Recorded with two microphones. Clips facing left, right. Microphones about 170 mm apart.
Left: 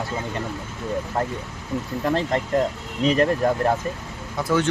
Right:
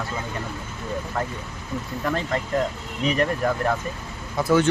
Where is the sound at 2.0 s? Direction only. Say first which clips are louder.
Left 3 dB; 30° left (ahead or behind).